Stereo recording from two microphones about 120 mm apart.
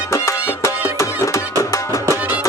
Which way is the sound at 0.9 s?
25° left (ahead or behind).